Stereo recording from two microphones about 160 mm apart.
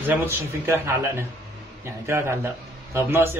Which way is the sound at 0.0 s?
15° right (ahead or behind).